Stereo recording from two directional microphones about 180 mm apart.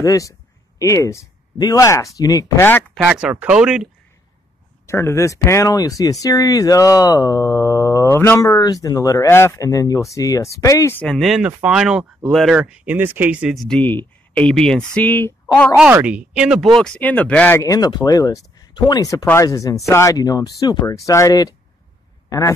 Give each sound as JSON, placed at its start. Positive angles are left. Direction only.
{"t": 0.0, "sound": "speech", "side_deg": 20}
{"t": 3.1, "sound": "speech", "side_deg": -5}
{"t": 4.8, "sound": "speech", "side_deg": 15}
{"t": 15.8, "sound": "speech", "side_deg": -5}
{"t": 17.6, "sound": "speech", "side_deg": 20}